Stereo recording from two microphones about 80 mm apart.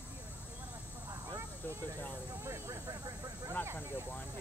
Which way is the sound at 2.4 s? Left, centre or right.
Right.